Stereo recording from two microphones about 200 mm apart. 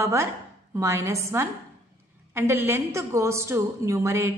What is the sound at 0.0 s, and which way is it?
A woman's voice, 15° right (ahead or behind).